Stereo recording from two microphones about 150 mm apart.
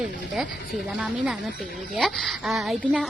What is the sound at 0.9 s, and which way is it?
Speech, 5° right (ahead or behind).